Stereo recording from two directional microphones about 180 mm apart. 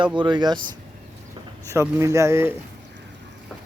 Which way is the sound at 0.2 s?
25° right (ahead or behind).